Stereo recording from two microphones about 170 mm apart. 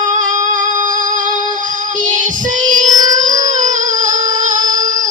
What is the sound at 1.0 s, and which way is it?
Music, 50° right (ahead or behind).